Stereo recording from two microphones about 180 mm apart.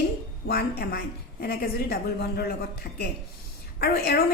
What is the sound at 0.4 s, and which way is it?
A woman's voice, 60° left (ahead or behind).